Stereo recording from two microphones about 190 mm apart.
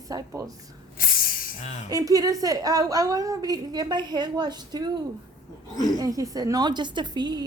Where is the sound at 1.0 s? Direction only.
50° left (ahead or behind).